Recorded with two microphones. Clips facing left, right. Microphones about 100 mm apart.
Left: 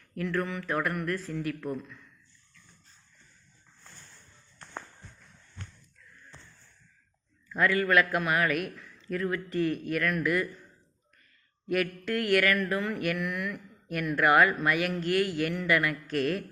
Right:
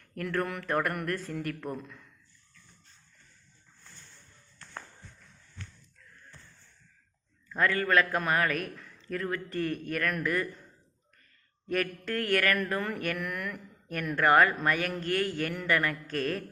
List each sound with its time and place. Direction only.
0.0 s speech: 50° right (ahead or behind)
7.5 s speech: 40° right (ahead or behind)
11.7 s speech: 40° right (ahead or behind)